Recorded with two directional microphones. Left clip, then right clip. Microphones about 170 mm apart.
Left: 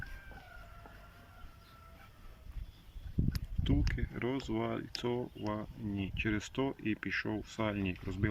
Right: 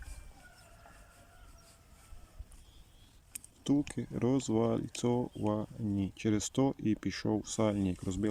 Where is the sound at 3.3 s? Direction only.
15° right (ahead or behind).